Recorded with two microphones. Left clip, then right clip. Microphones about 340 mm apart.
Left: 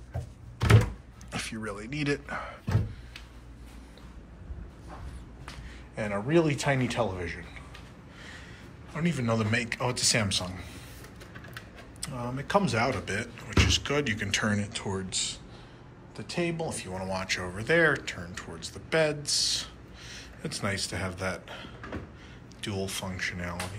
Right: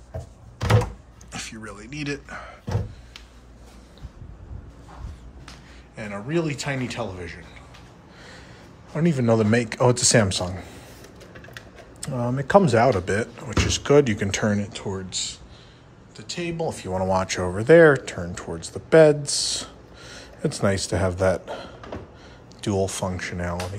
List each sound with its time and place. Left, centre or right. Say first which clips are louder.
1.3 s a man's voice: even; centre
5.9 s a man's voice: left 1 dB; centre
8.9 s speech: right 9 dB; right
12.1 s speech: right 9 dB; right
14.4 s a man's voice: right 5 dB; centre
16.5 s speech: right 8 dB; right
20.4 s speech: right 9 dB; right